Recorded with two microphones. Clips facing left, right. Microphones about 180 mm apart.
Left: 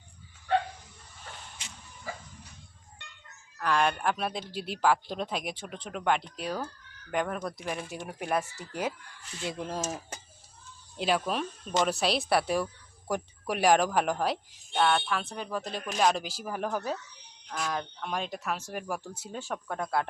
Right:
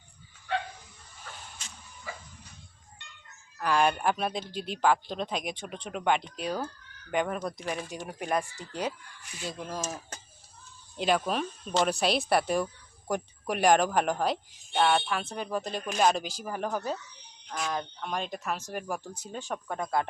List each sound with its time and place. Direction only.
3.6 s speech: 5° right (ahead or behind)
9.6 s speech: 25° left (ahead or behind)
10.9 s speech: 5° left (ahead or behind)